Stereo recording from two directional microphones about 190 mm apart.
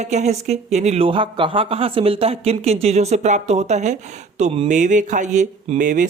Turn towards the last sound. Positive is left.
turn(degrees=-40)  # may be behind; listen again after turning